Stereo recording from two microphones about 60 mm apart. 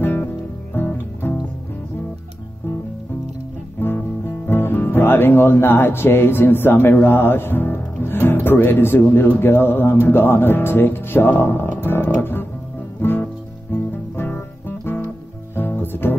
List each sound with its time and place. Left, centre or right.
0.0 s music: left
3.8 s guitar: left
4.5 s speech: left
13.0 s music: left